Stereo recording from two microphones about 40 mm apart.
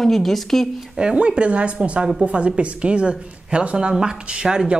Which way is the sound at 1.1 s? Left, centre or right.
Right.